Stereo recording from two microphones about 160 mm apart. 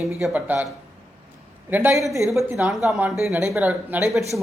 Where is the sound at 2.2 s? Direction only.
Centre (ahead or behind).